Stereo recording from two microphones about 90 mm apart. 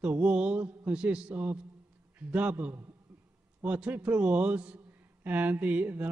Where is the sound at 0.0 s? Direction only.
15° right (ahead or behind).